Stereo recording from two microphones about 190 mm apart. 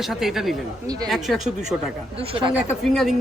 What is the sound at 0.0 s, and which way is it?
Speech, centre (ahead or behind).